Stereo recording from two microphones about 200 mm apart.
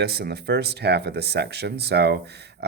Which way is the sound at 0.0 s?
50° right (ahead or behind).